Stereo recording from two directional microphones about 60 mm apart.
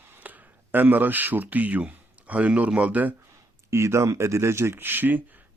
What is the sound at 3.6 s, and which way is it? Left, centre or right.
Speech, right.